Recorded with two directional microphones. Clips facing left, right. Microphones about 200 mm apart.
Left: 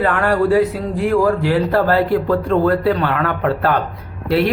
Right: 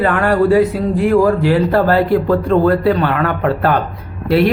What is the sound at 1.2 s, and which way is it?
Speech, 20° right (ahead or behind).